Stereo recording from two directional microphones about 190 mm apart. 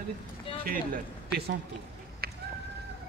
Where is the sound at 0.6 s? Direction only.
50° right (ahead or behind).